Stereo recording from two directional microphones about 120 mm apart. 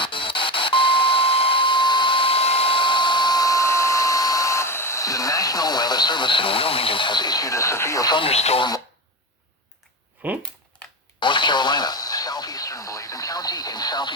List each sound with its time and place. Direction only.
0.0 s doorbell: 45° left (ahead or behind); by 8.1 s 25° left (ahead or behind)
8.1 s speech: 55° left (ahead or behind)
10.2 s speech: 15° right (ahead or behind)
11.2 s radio: 40° left (ahead or behind)